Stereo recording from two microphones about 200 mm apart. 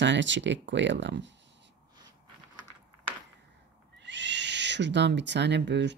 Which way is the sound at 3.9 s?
60° right (ahead or behind).